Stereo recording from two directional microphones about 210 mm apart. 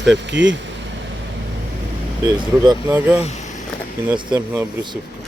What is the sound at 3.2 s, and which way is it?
Speech, 35° left (ahead or behind).